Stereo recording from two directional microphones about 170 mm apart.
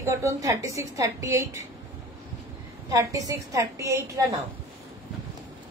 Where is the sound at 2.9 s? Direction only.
20° right (ahead or behind).